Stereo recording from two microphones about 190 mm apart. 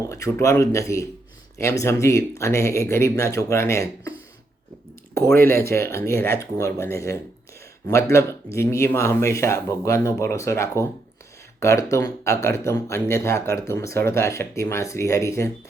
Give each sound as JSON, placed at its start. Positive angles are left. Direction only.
{"t": 0.1, "sound": "speech", "side_deg": 15}
{"t": 5.1, "sound": "speech", "side_deg": 15}